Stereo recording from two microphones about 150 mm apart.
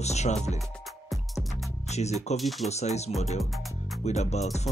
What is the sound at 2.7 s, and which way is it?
Music, 45° left (ahead or behind).